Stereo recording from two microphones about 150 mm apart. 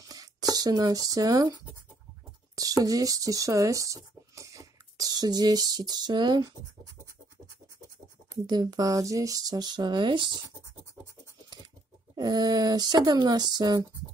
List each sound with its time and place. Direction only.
0.1 s a sound: 25° right (ahead or behind)
2.5 s speech: 25° right (ahead or behind)
8.5 s speech: 30° right (ahead or behind)
12.2 s speech: 30° right (ahead or behind)